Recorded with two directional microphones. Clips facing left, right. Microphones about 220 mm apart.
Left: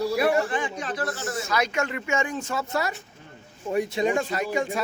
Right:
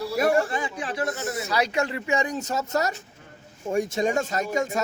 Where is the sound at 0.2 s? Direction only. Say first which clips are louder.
Right 5 dB; 45° right (ahead or behind).